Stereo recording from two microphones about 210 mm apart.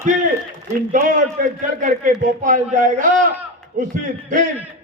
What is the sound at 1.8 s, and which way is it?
A man's voice, 40° right (ahead or behind).